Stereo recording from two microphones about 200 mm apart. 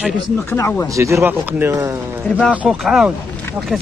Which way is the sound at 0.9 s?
15° right (ahead or behind).